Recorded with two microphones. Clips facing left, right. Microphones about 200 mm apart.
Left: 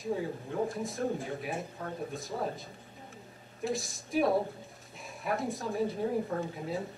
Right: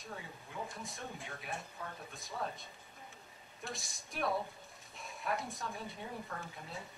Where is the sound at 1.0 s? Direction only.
35° left (ahead or behind).